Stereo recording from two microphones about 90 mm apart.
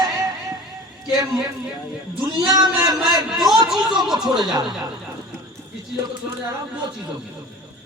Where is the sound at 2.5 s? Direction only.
45° right (ahead or behind).